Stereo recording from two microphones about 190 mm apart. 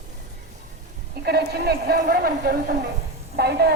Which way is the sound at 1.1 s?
55° right (ahead or behind).